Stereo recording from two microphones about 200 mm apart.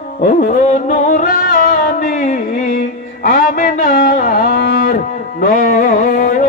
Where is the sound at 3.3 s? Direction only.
45° left (ahead or behind).